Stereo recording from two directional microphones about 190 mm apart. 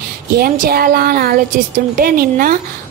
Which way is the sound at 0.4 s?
55° right (ahead or behind).